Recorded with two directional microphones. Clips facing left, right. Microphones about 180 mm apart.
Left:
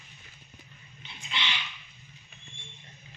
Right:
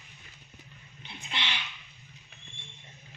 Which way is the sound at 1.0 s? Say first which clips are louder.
Left 1 dB; 60° right (ahead or behind).